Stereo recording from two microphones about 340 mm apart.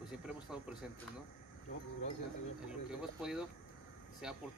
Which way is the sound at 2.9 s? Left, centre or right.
Centre.